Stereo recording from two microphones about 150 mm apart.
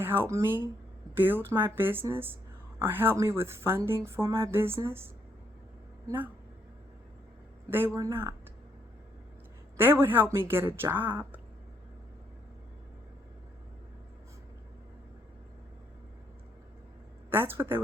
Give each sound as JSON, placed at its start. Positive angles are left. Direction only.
{"t": 0.0, "sound": "a woman's voice", "side_deg": -15}
{"t": 7.7, "sound": "a woman's voice", "side_deg": -15}
{"t": 9.7, "sound": "a woman's voice", "side_deg": -15}
{"t": 17.2, "sound": "speech", "side_deg": -15}